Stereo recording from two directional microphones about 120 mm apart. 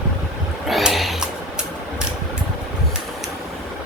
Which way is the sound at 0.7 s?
Centre (ahead or behind).